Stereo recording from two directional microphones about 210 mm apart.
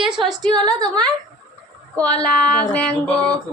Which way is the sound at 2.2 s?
5° left (ahead or behind).